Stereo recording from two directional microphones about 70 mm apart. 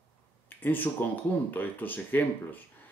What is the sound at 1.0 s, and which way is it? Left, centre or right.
Speech, left.